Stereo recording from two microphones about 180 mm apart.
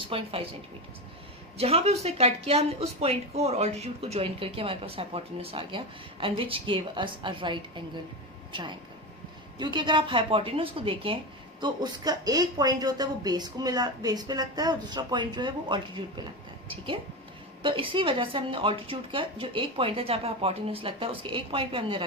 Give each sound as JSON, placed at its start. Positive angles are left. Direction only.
{"t": 0.1, "sound": "speech", "side_deg": -30}
{"t": 1.5, "sound": "speech", "side_deg": -35}
{"t": 9.6, "sound": "speech", "side_deg": -25}
{"t": 17.6, "sound": "speech", "side_deg": -30}